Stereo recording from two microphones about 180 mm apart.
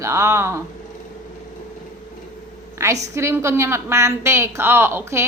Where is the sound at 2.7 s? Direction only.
15° right (ahead or behind).